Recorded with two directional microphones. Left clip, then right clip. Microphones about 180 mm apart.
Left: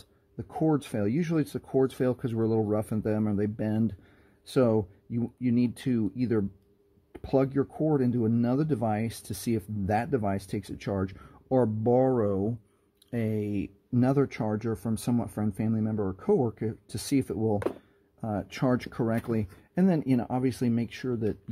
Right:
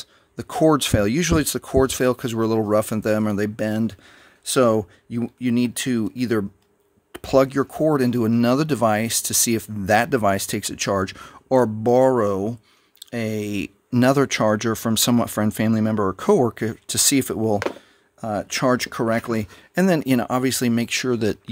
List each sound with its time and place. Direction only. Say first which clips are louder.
0.4 s speech: right 11 dB; 40° right (ahead or behind)
18.2 s speech: right 9 dB; 15° right (ahead or behind); by 21.4 s 35° right (ahead or behind)